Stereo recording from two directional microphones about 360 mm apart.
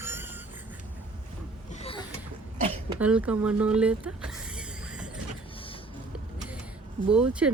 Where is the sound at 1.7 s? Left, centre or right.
Centre.